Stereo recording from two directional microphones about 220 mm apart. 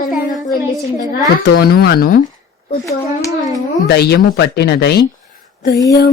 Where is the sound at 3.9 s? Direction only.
45° left (ahead or behind).